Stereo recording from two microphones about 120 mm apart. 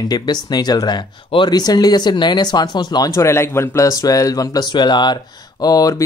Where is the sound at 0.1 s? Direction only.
35° left (ahead or behind).